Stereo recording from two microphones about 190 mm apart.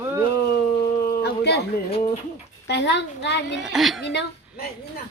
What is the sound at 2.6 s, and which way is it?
Speech, 65° left (ahead or behind).